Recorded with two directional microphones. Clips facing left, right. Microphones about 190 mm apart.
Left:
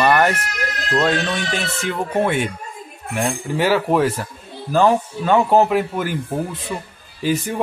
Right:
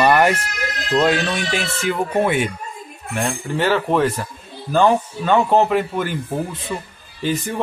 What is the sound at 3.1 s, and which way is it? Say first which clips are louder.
Speech: left 1 dB; 10° left (ahead or behind).